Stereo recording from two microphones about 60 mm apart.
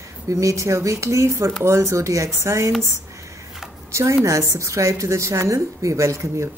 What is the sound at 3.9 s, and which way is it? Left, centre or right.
A woman's voice, right.